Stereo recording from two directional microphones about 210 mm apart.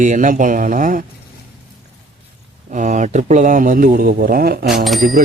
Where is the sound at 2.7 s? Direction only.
35° right (ahead or behind).